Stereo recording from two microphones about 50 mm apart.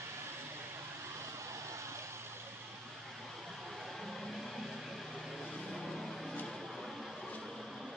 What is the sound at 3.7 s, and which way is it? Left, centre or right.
Vehicle, centre.